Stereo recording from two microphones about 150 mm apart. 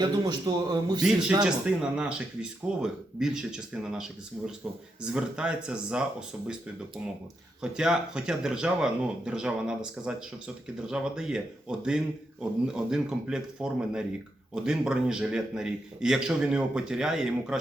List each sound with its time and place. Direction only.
0.0 s a man's voice: 25° right (ahead or behind)
1.5 s speech: 5° right (ahead or behind)
7.6 s speech: 5° right (ahead or behind)